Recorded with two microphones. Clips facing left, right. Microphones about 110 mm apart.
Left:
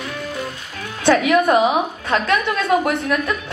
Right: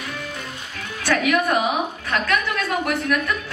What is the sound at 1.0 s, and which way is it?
A woman's voice, 25° left (ahead or behind).